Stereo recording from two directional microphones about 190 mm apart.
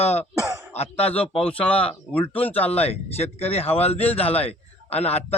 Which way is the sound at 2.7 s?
30° left (ahead or behind).